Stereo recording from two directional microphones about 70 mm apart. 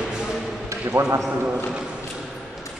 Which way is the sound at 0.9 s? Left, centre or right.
Right.